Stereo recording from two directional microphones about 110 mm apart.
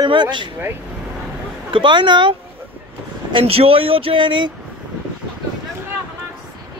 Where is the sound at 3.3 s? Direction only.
60° right (ahead or behind).